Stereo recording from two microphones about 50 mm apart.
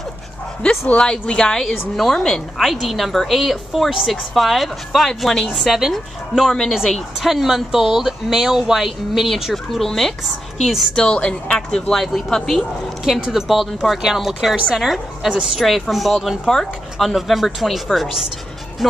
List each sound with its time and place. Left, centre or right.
0.6 s a woman's voice: left; by 10.1 s centre
11.0 s a woman's voice: centre
11.9 s speech: centre
13.0 s a woman's voice: centre
16.4 s speech: centre
17.1 s speech: centre